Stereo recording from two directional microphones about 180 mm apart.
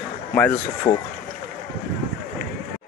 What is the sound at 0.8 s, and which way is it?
Speech, 35° left (ahead or behind).